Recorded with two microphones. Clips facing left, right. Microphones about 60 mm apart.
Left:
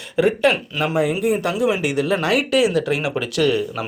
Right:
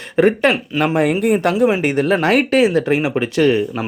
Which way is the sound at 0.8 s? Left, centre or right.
Right.